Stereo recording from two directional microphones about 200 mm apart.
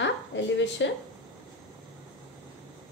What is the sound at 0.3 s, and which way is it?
Speech, 65° left (ahead or behind).